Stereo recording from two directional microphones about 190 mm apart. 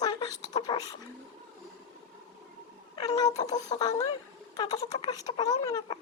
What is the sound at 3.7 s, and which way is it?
Speech, 20° left (ahead or behind).